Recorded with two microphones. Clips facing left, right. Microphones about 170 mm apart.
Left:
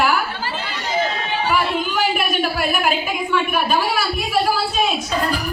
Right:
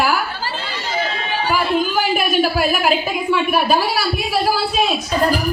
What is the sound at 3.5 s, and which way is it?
Speech, 40° right (ahead or behind).